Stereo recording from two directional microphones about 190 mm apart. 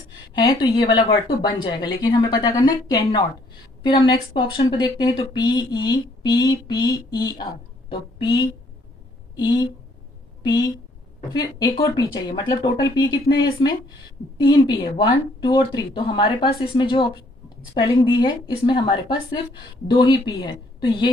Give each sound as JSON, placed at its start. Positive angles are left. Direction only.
{"t": 0.3, "sound": "a woman's voice", "side_deg": 20}
{"t": 11.8, "sound": "a woman's voice", "side_deg": 20}